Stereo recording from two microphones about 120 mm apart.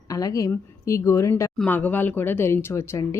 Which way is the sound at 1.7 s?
15° left (ahead or behind).